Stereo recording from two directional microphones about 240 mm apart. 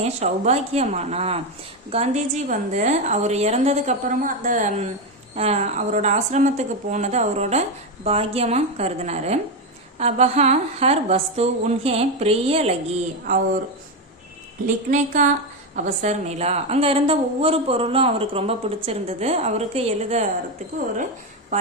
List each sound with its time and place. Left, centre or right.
0.0 s a woman's voice: right
14.8 s a woman's voice: right
21.5 s speech: right